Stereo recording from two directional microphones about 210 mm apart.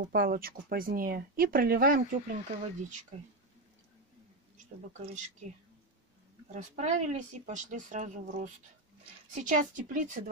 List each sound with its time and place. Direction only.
0.1 s speech: 45° right (ahead or behind)
5.0 s speech: 35° right (ahead or behind)
6.5 s speech: 35° right (ahead or behind)